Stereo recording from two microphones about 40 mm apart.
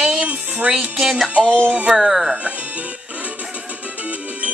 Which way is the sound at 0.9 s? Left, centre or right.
Centre.